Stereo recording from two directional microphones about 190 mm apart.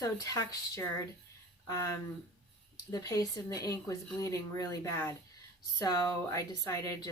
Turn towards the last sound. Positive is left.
turn(degrees=20)  # may be behind; listen again after turning